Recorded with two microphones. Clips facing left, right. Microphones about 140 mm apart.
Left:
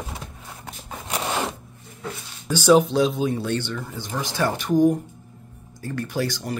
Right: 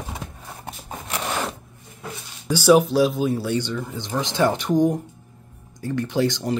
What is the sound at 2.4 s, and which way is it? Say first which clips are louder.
Speech: right 1 dB; 10° right (ahead or behind).